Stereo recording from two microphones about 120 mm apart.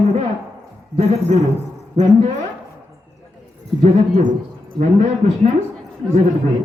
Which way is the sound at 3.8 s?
80° right.